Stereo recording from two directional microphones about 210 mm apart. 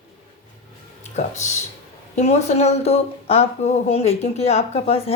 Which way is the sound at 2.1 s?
30° left (ahead or behind).